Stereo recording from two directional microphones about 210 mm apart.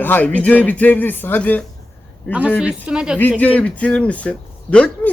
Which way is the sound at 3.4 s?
5° left (ahead or behind).